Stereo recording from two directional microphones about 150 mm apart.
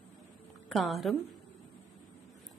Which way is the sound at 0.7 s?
Centre (ahead or behind).